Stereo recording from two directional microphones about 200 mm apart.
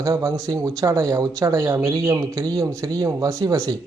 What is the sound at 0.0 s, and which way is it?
Speech, 15° right (ahead or behind).